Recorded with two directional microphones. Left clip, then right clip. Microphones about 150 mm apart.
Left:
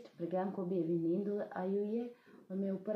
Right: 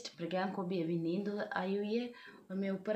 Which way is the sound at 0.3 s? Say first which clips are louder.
Even; 25° right (ahead or behind).